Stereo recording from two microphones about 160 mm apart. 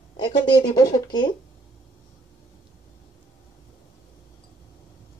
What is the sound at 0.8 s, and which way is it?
Speech, 30° left (ahead or behind).